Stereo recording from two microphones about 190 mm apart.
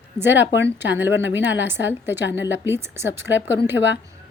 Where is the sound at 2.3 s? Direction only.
70° left (ahead or behind).